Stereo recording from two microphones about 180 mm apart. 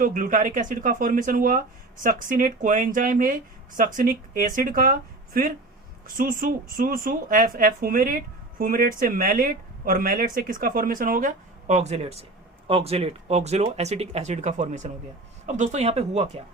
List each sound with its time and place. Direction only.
0.0 s speech: 45° right (ahead or behind)